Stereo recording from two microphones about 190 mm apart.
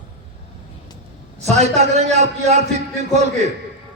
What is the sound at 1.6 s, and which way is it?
A man's voice, 35° right (ahead or behind).